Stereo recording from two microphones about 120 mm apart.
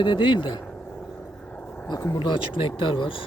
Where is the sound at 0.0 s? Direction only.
45° left (ahead or behind).